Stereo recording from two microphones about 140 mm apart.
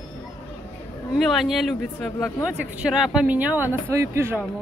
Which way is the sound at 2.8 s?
5° right (ahead or behind).